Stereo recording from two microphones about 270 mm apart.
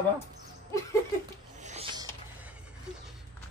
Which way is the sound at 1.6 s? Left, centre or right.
Centre.